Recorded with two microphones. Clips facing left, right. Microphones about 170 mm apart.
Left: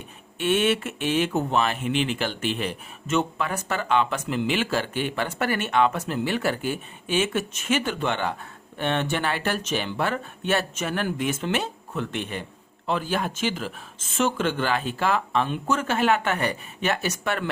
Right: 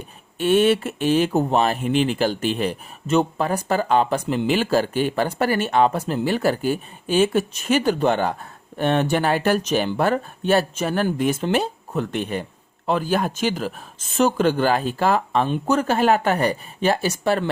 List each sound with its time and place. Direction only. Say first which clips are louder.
0.3 s speech: right 5 dB; 35° right (ahead or behind)